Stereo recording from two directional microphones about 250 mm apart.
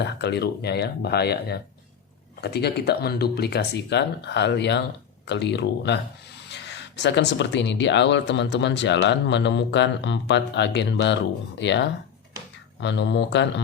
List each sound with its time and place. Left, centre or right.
0.0 s speech: left